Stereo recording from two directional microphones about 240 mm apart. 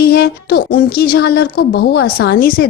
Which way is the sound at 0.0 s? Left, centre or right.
Left.